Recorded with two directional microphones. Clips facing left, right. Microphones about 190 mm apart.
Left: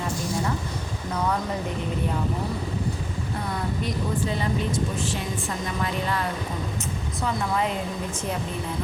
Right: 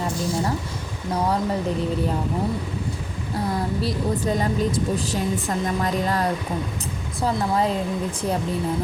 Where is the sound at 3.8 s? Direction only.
40° right (ahead or behind).